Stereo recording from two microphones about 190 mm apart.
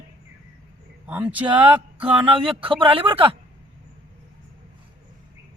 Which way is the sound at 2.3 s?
30° right (ahead or behind).